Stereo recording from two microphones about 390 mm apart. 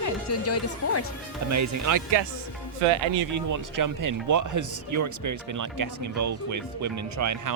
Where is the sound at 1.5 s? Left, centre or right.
Right.